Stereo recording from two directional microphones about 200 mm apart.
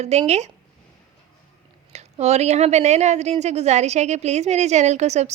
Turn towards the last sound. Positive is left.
turn(degrees=-35)  # may be behind; listen again after turning